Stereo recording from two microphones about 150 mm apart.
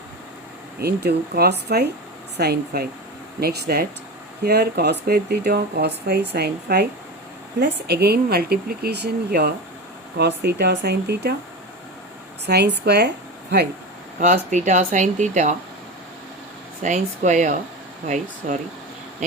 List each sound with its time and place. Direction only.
0.8 s speech: 90° right
12.5 s speech: 90° right
14.5 s speech: 55° right (ahead or behind)
16.8 s speech: 55° right (ahead or behind)